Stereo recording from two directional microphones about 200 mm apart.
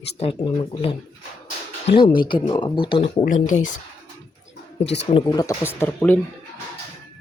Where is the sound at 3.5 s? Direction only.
40° left (ahead or behind).